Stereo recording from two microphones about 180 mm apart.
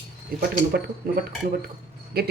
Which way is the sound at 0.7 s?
60° right (ahead or behind).